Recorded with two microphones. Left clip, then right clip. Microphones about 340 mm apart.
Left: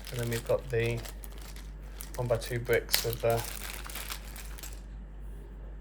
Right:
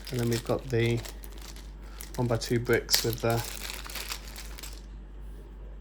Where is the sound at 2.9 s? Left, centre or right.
Centre.